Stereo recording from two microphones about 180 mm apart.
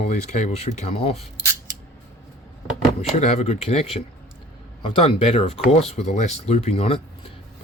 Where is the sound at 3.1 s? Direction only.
40° left (ahead or behind).